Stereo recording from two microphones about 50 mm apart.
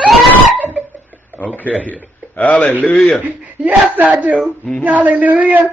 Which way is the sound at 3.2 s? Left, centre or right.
Right.